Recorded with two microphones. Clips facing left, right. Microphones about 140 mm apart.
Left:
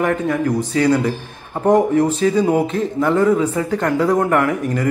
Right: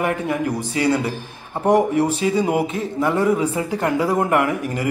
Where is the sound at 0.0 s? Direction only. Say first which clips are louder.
Left 3 dB; 10° right (ahead or behind).